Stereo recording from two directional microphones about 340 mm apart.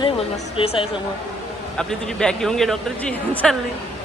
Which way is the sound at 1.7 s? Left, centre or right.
Centre.